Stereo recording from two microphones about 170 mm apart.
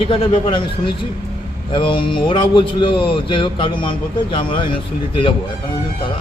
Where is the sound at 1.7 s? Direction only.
30° left (ahead or behind).